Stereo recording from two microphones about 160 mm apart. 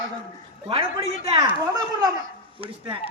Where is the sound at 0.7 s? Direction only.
35° right (ahead or behind).